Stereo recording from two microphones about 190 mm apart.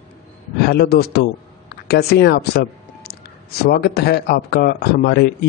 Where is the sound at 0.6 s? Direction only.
55° left (ahead or behind).